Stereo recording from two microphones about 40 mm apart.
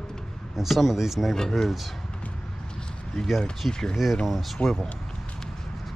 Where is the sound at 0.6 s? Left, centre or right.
Centre.